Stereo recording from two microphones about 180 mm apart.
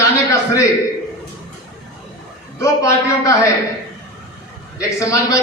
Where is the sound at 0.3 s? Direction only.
15° left (ahead or behind).